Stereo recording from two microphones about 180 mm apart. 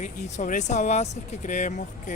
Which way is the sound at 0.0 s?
45° left (ahead or behind).